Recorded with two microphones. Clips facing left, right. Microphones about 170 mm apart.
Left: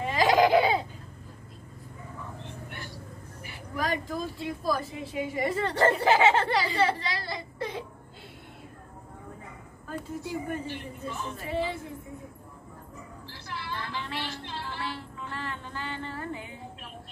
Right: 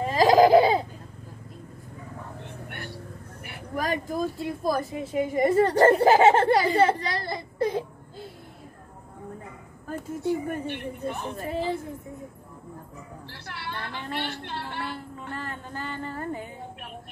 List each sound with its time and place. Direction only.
0.0 s a sound: 40° right (ahead or behind)
2.7 s vehicle: 65° right (ahead or behind)
3.4 s speech: 55° right (ahead or behind)
9.9 s speech: 55° right (ahead or behind)
11.3 s speech: 40° right (ahead or behind)
13.3 s a sound: 60° right (ahead or behind)
14.1 s a woman's voice: 60° right (ahead or behind); by 16.4 s 45° right (ahead or behind)